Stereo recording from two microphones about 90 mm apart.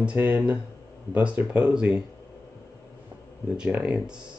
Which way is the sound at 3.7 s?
15° right (ahead or behind).